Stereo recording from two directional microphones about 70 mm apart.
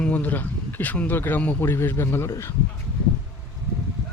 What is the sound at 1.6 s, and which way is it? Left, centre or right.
Speech, left.